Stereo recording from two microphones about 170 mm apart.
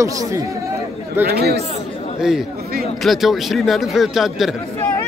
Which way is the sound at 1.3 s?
70° right (ahead or behind).